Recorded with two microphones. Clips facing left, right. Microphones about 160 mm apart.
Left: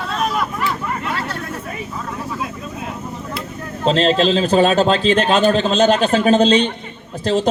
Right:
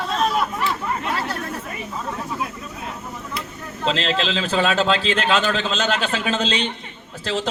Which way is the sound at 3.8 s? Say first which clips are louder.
Left 7 dB; 40° left (ahead or behind).